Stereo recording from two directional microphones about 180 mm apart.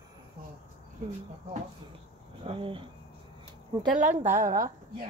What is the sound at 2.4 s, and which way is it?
Speech, 30° right (ahead or behind).